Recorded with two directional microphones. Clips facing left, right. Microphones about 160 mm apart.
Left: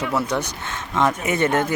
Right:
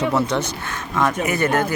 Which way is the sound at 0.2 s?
10° left (ahead or behind).